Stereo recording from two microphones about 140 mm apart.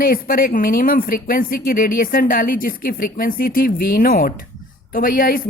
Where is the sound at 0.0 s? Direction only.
90° left.